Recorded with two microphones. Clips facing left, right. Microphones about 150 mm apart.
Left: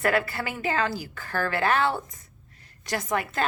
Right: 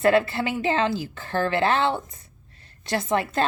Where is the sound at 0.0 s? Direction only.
25° right (ahead or behind).